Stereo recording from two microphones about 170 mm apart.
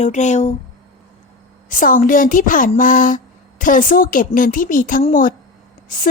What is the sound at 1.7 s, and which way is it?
A woman's voice, 50° left (ahead or behind).